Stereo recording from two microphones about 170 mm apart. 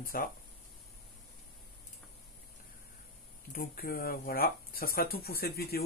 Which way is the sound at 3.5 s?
60° left (ahead or behind).